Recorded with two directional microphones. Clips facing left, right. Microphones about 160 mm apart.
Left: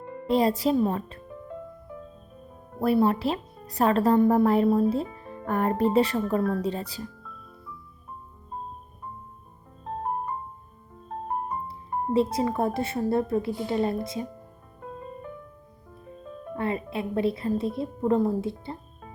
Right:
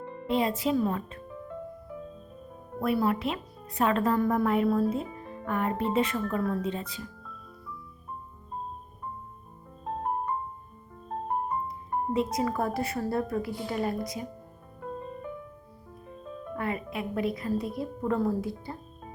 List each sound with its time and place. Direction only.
0.3 s a woman's voice: 35° left (ahead or behind)
2.8 s a woman's voice: 30° left (ahead or behind)
11.7 s speech: 30° left (ahead or behind)
16.6 s speech: 30° left (ahead or behind)